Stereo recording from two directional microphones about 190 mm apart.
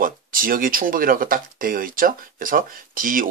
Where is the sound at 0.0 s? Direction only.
50° right (ahead or behind).